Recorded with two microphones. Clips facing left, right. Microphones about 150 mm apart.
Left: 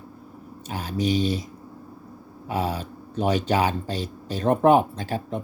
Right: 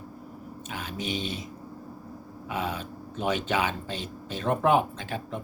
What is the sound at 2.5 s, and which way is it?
Speech, 35° left (ahead or behind).